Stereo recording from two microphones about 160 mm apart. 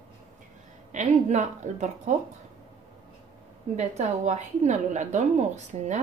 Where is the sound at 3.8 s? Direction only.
45° right (ahead or behind).